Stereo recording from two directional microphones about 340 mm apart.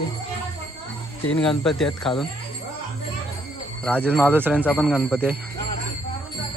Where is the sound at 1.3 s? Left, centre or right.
Centre.